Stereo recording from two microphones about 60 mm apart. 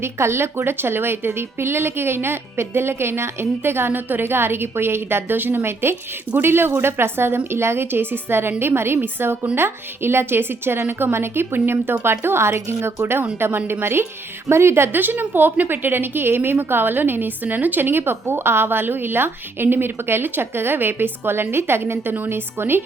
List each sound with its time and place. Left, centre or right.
0.0 s a woman's voice: right
14.9 s a woman's voice: right